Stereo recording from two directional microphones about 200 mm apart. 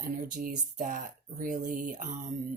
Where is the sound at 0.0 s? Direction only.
45° right (ahead or behind).